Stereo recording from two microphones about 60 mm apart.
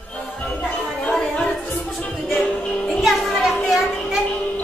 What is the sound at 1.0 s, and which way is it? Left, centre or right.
Music, centre.